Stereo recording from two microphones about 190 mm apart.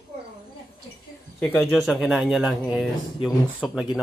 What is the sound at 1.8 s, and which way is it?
Speech, centre (ahead or behind).